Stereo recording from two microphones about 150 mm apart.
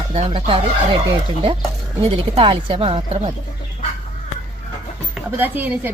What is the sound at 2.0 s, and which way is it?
Speech, 40° right (ahead or behind).